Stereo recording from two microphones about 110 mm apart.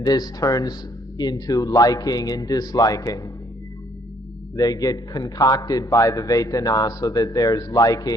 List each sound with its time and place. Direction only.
0.0 s a man's voice: 35° left (ahead or behind)
4.5 s a man's voice: 35° left (ahead or behind)